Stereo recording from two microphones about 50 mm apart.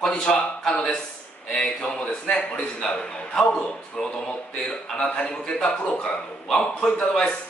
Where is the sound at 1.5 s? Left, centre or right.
Centre.